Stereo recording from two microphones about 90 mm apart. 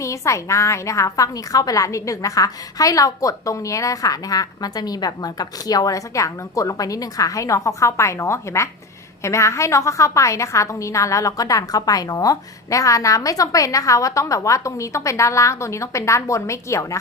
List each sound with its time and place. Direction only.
0.0 s a woman's voice: 35° left (ahead or behind)